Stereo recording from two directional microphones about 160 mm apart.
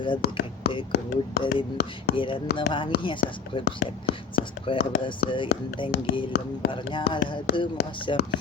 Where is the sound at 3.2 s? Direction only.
90° left.